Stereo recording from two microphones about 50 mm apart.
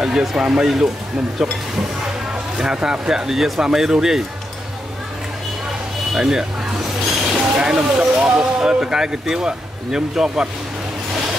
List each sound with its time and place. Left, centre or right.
0.0 s speech: centre
2.6 s speech: centre
6.1 s speech: centre